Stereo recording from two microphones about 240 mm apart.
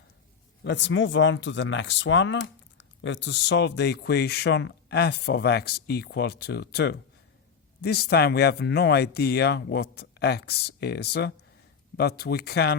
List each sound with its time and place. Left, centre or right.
0.6 s speech: left